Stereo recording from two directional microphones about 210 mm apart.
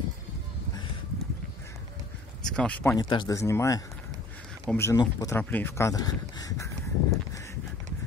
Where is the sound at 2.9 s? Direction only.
20° left (ahead or behind).